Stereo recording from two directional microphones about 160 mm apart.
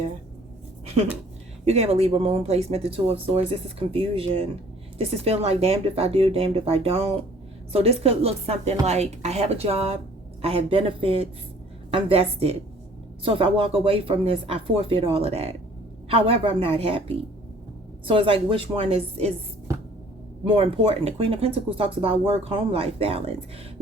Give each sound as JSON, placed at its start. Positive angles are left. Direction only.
{"t": 1.6, "sound": "speech", "side_deg": -45}
{"t": 20.4, "sound": "speech", "side_deg": -35}